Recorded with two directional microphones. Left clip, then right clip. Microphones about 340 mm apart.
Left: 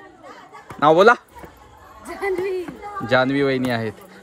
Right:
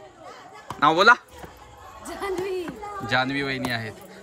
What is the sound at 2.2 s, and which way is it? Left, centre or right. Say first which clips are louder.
Speech: left 5 dB; centre.